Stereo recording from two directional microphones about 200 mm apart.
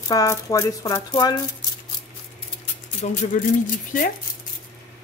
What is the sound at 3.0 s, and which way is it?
Speech, 40° left (ahead or behind).